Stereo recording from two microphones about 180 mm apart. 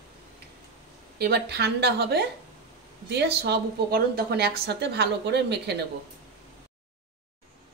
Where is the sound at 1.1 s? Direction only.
65° right (ahead or behind).